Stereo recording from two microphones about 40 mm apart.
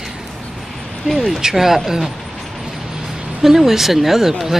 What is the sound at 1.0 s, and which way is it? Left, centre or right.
Speech, centre.